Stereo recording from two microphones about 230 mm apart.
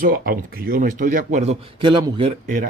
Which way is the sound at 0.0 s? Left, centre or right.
Right.